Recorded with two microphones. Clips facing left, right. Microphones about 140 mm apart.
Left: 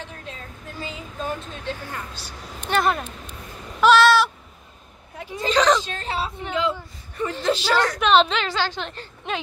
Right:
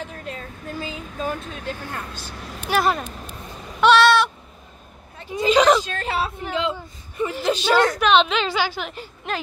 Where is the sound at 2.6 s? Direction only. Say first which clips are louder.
Right 1 dB; 5° right (ahead or behind).